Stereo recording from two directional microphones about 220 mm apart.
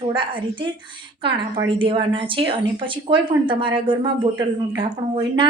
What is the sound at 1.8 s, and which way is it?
Speech, 25° right (ahead or behind).